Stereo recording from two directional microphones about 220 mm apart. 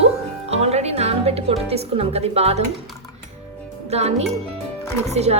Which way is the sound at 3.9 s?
30° right (ahead or behind).